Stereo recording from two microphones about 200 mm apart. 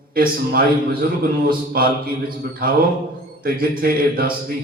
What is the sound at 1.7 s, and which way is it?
Mantra, 50° right (ahead or behind).